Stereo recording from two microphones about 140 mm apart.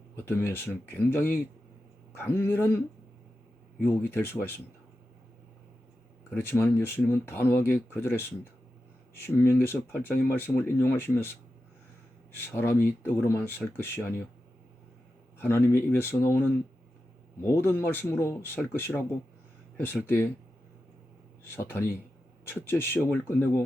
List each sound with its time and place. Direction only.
0.2 s speech: 15° left (ahead or behind)
6.3 s speech: 15° left (ahead or behind)
12.5 s speech: 15° left (ahead or behind)
15.4 s speech: 15° left (ahead or behind)
21.5 s speech: 15° left (ahead or behind)